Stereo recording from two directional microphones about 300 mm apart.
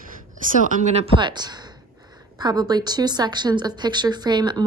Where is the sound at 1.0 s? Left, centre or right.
Centre.